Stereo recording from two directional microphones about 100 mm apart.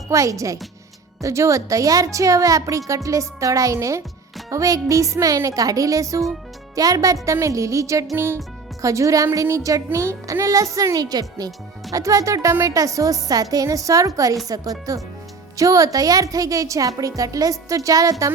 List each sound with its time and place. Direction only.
0.1 s a woman's voice: 30° right (ahead or behind)